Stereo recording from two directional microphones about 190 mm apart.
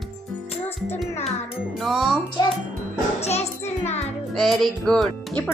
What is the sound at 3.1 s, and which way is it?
Music, 35° left (ahead or behind).